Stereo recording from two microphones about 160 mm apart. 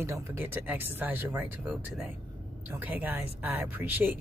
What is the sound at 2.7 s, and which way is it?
Speech, 10° right (ahead or behind).